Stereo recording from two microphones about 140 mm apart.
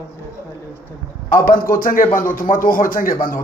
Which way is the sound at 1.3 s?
90° left.